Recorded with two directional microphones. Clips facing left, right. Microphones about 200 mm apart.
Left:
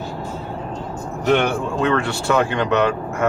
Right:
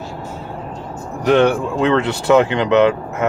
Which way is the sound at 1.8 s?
20° right (ahead or behind).